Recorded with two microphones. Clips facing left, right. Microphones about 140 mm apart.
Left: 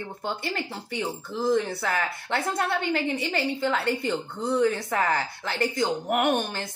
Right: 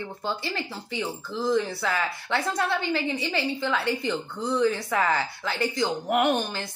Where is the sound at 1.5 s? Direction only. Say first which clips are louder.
Right 1 dB; 55° left (ahead or behind).